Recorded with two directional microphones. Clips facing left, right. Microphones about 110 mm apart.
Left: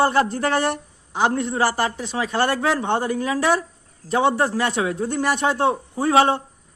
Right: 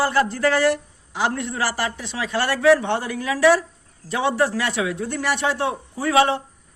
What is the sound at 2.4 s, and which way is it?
Speech, 45° left (ahead or behind).